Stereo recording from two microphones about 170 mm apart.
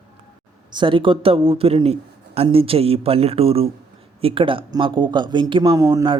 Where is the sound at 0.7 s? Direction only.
30° right (ahead or behind).